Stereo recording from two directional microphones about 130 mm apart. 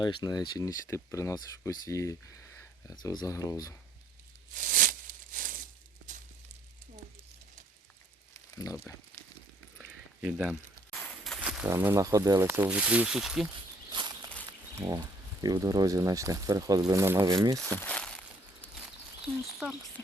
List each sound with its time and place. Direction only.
0.0 s speech: 35° left (ahead or behind)
2.9 s speech: 30° left (ahead or behind)
4.5 s a sound: 90° right
8.3 s a sound: 25° left (ahead or behind)
9.7 s a sound: 10° right (ahead or behind)
11.8 s speech: 20° right (ahead or behind)
12.6 s speech: 10° right (ahead or behind)
13.9 s walk: 35° right (ahead or behind)
14.8 s speech: 25° right (ahead or behind)
17.7 s crumpling: 15° left (ahead or behind)
19.5 s speech: centre (ahead or behind)